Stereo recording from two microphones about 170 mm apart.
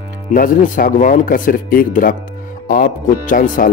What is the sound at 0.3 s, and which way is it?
Speech, 55° left (ahead or behind).